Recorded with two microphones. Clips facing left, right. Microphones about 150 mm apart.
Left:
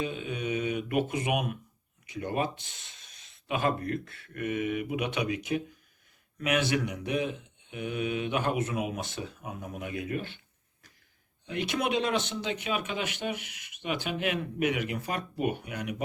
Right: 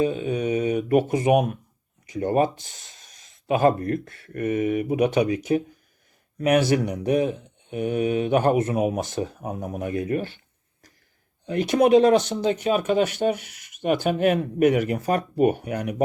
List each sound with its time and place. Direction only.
0.0 s speech: 40° right (ahead or behind)
11.4 s speech: 40° right (ahead or behind)